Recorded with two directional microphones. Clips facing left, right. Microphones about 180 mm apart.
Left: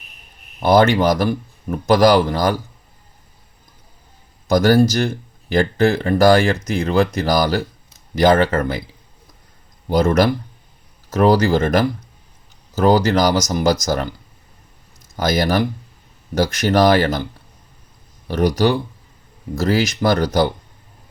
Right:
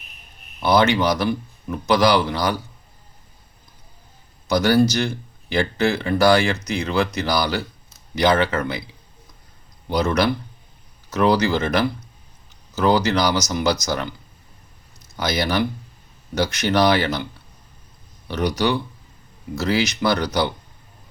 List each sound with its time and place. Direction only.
0.6 s speech: 50° left (ahead or behind)
4.4 s speech: 50° left (ahead or behind)
9.9 s speech: 45° left (ahead or behind)
15.1 s speech: 50° left (ahead or behind)
18.3 s speech: 45° left (ahead or behind)